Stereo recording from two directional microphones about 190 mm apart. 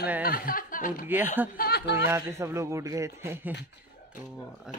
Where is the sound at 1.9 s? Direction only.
15° right (ahead or behind).